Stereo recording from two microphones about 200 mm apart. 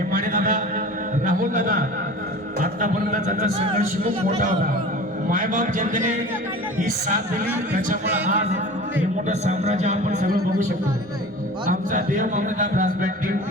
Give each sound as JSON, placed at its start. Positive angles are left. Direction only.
{"t": 0.1, "sound": "a sound", "side_deg": -45}
{"t": 2.6, "sound": "a man's voice", "side_deg": -40}
{"t": 5.3, "sound": "a man's voice", "side_deg": -40}
{"t": 9.4, "sound": "a man's voice", "side_deg": -35}
{"t": 11.7, "sound": "a man's voice", "side_deg": -40}